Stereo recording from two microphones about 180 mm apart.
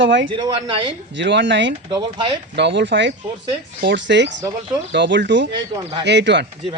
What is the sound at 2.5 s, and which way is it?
Speech, 75° right (ahead or behind).